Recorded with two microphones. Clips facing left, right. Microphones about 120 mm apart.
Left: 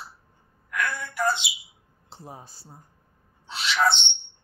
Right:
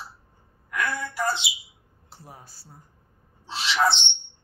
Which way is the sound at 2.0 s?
25° left (ahead or behind).